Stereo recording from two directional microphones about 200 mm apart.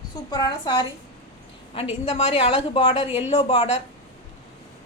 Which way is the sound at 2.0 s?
30° left (ahead or behind).